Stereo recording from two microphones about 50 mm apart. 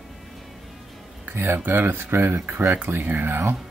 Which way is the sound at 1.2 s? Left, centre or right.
Right.